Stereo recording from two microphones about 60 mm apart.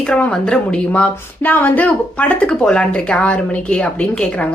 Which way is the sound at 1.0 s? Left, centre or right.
Left.